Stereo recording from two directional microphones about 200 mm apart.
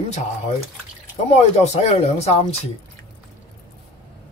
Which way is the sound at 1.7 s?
35° left (ahead or behind).